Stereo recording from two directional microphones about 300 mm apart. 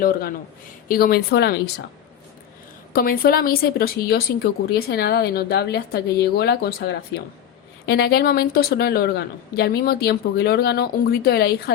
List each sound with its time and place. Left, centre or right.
0.0 s a man's voice: left
2.9 s a woman's voice: left